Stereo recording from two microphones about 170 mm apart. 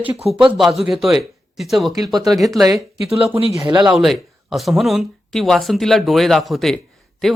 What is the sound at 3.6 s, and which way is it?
Speech, 25° right (ahead or behind).